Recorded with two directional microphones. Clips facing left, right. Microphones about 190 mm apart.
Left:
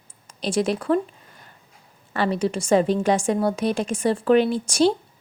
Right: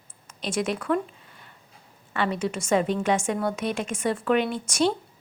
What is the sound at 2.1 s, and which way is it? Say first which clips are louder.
A woman's voice: left 4 dB; 35° left (ahead or behind).